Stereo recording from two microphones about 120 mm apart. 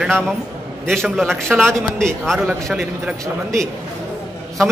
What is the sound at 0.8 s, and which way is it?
Speech, centre (ahead or behind).